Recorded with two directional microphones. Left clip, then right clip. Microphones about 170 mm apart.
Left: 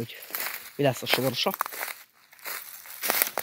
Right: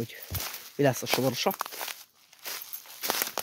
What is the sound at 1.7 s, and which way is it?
Walk, 15° left (ahead or behind).